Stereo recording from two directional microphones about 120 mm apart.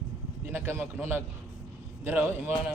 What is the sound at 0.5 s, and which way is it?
A man's voice, 20° right (ahead or behind).